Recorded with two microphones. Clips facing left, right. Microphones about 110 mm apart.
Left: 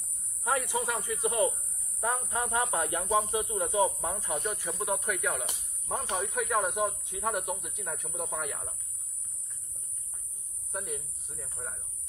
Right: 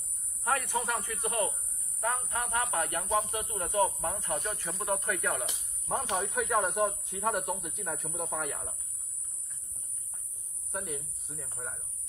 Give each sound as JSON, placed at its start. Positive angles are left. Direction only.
{"t": 0.5, "sound": "speech", "side_deg": 15}
{"t": 4.4, "sound": "speech", "side_deg": 0}
{"t": 10.7, "sound": "speech", "side_deg": 0}